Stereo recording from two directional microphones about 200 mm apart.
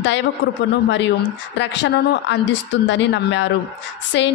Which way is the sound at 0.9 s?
65° left (ahead or behind).